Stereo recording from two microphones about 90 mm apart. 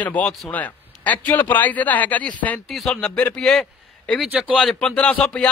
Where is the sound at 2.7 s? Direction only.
5° left (ahead or behind).